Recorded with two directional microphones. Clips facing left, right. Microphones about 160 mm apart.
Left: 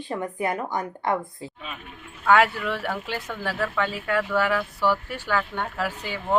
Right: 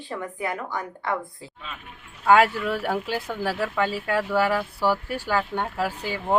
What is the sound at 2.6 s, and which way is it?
Speech, 10° right (ahead or behind).